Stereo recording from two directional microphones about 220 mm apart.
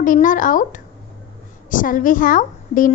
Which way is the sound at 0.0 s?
35° left (ahead or behind).